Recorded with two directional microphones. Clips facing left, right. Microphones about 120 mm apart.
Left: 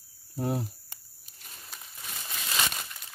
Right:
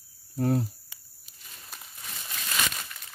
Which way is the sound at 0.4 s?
15° left (ahead or behind).